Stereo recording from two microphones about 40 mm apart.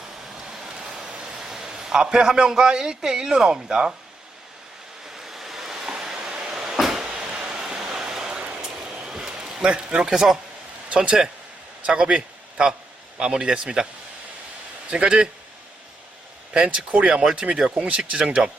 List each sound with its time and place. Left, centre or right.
0.5 s vehicle: centre
1.5 s a man's voice: centre
5.1 s waves: centre
6.3 s cupboard open or close: right
7.0 s a sound: centre
8.1 s vehicle: centre
9.0 s basketball bounce: centre
9.6 s speech: right
10.8 s a man's voice: right
14.8 s a man's voice: right
16.5 s speech: centre